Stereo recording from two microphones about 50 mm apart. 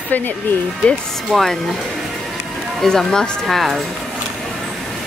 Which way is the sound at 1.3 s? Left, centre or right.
Centre.